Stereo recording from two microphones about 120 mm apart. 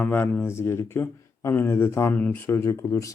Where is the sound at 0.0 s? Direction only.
10° left (ahead or behind).